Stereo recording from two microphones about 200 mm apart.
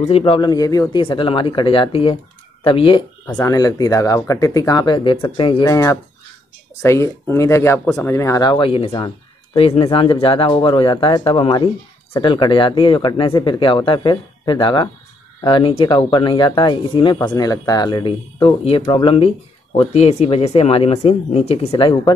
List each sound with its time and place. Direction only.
0.0 s speech: 30° left (ahead or behind)
3.3 s speech: 15° left (ahead or behind)